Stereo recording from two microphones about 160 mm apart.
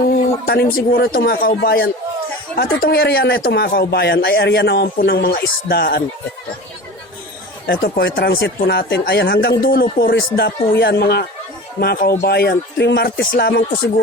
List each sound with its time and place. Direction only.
0.4 s speech: 70° left (ahead or behind); by 6.0 s 90° left
7.7 s speech: 80° left
9.6 s speech: 70° left (ahead or behind)